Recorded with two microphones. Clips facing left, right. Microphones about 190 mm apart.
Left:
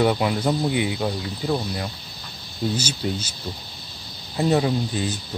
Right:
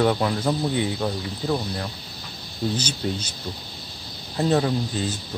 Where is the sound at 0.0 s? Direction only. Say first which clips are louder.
Left 1 dB; 10° left (ahead or behind).